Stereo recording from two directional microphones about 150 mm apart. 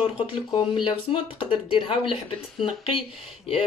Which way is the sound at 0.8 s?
35° left (ahead or behind).